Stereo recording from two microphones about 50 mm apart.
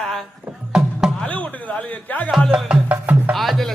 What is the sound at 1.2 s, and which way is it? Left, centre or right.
Speech, left.